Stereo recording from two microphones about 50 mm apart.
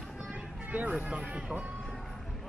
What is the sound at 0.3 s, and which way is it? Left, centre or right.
Vehicle, right.